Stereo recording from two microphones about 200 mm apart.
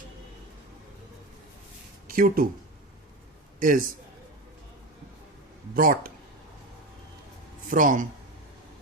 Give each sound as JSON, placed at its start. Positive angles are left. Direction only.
{"t": 2.0, "sound": "speech", "side_deg": -45}
{"t": 3.6, "sound": "speech", "side_deg": -45}
{"t": 5.7, "sound": "speech", "side_deg": -45}
{"t": 7.7, "sound": "speech", "side_deg": -40}